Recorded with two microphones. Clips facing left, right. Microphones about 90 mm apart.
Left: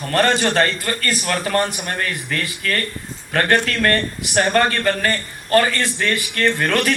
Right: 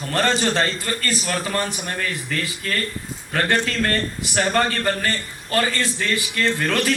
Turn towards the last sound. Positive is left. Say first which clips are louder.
# left 3 dB
turn(degrees=55)  # may be behind; listen again after turning